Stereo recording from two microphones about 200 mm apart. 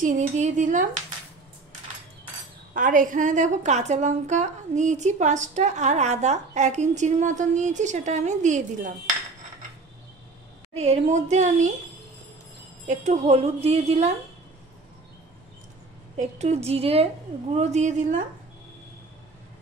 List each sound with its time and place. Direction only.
0.0 s a woman's voice: 40° right (ahead or behind)
2.7 s a woman's voice: 40° right (ahead or behind)
10.7 s a woman's voice: 35° right (ahead or behind)
12.8 s a woman's voice: 35° right (ahead or behind)
16.2 s a woman's voice: 35° right (ahead or behind)